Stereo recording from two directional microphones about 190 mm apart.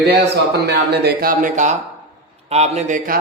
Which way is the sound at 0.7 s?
60° right (ahead or behind).